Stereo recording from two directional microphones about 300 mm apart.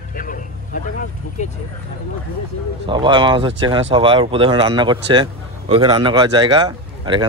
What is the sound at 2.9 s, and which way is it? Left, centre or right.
Speech, centre.